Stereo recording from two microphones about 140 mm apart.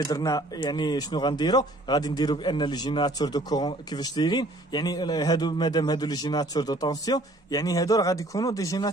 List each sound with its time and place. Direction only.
0.0 s speech: 25° left (ahead or behind)